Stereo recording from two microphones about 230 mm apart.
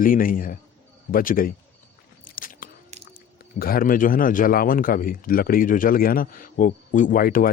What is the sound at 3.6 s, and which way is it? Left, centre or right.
Speech, left.